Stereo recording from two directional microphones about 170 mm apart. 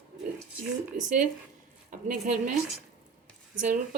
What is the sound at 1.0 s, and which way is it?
Speech, 50° right (ahead or behind).